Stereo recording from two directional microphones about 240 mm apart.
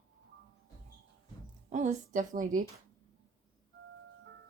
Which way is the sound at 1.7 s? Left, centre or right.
Right.